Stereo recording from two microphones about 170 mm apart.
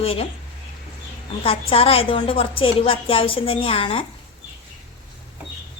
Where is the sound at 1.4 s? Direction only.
35° left (ahead or behind).